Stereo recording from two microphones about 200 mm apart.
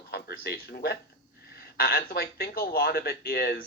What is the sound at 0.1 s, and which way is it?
Speech, 50° left (ahead or behind).